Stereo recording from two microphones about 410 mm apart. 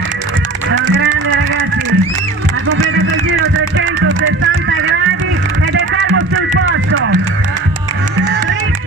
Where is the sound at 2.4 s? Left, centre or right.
Right.